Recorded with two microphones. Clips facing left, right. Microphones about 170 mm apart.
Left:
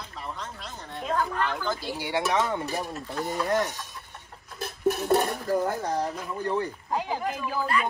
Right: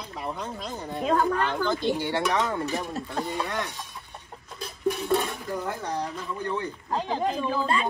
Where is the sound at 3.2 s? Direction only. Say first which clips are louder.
Left 4 dB; 45° left (ahead or behind).